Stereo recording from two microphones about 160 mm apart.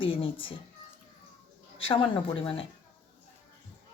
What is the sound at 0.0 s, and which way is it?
Speech, 35° left (ahead or behind).